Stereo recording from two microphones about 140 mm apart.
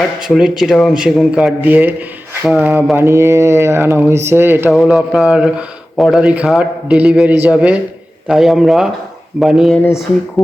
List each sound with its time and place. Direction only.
0.3 s a man's voice: 5° right (ahead or behind)
4.7 s a man's voice: centre (ahead or behind)
9.7 s speech: 15° left (ahead or behind)
10.4 s a man's voice: centre (ahead or behind)